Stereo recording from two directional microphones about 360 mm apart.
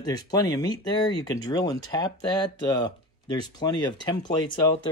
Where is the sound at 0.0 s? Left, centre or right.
Centre.